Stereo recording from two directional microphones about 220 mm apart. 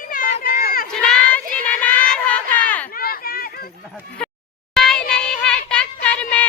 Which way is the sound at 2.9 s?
40° left (ahead or behind).